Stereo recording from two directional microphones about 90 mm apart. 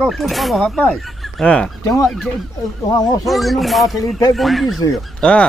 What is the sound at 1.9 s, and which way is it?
Speech, 35° left (ahead or behind).